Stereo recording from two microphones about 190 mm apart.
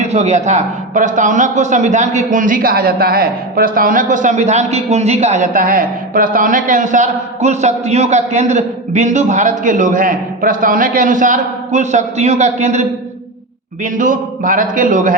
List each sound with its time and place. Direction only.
0.0 s a man's voice: 35° right (ahead or behind)
13.8 s speech: 45° right (ahead or behind)